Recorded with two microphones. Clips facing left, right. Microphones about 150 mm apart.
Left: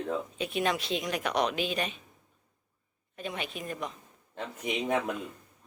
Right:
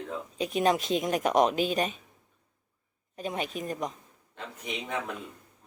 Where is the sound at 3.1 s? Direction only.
40° right (ahead or behind).